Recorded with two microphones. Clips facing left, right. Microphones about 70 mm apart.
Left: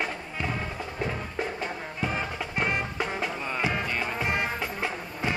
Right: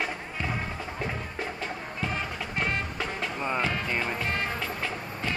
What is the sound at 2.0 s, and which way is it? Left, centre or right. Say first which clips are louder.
Music: left 2 dB; centre.